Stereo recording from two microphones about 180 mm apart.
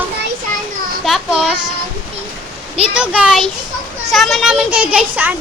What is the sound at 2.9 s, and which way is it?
A child's voice, 5° right (ahead or behind).